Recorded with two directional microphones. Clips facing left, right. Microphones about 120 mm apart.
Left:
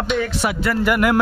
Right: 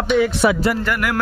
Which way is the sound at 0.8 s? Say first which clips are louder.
Left 5 dB; 20° left (ahead or behind).